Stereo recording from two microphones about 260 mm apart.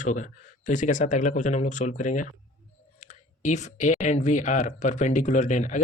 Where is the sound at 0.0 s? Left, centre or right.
Left.